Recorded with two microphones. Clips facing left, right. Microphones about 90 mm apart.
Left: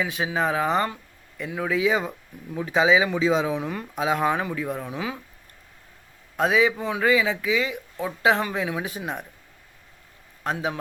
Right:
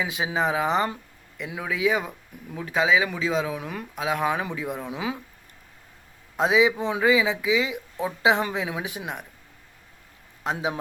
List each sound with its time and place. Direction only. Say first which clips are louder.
0.0 s speech: left 1 dB; 10° right (ahead or behind)
6.5 s speech: right 1 dB; 10° right (ahead or behind)
6.7 s speech: right 1 dB; 25° right (ahead or behind)
7.0 s speech: even; 10° right (ahead or behind)
10.4 s speech: even; 15° right (ahead or behind)